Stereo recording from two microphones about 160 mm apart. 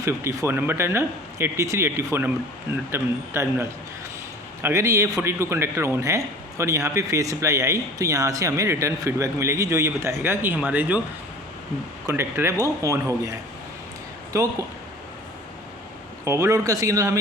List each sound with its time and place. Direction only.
0.0 s speech: 20° right (ahead or behind)
12.0 s speech: 15° right (ahead or behind)
16.2 s speech: 20° right (ahead or behind)